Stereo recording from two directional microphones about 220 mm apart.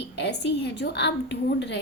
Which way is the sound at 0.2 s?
50° left (ahead or behind).